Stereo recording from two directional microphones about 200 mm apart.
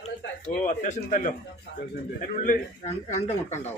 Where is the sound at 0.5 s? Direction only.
40° left (ahead or behind).